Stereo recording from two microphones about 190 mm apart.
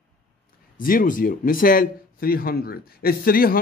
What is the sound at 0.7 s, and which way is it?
Speech, 45° left (ahead or behind).